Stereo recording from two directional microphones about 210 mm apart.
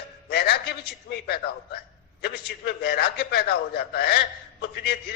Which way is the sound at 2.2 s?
50° left (ahead or behind).